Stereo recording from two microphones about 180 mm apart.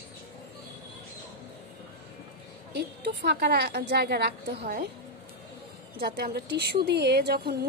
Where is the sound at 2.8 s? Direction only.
65° right (ahead or behind).